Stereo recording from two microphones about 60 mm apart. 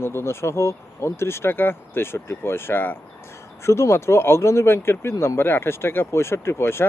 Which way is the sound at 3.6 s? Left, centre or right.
Left.